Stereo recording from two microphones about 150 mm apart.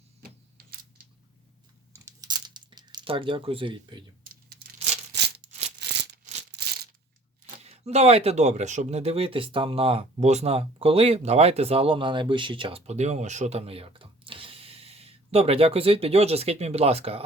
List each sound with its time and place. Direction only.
2.3 s coin: 30° right (ahead or behind)
5.4 s a sound: 50° right (ahead or behind)
7.6 s speech: 45° right (ahead or behind)